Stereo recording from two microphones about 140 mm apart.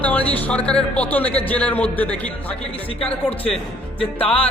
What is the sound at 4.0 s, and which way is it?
Speech, 40° left (ahead or behind).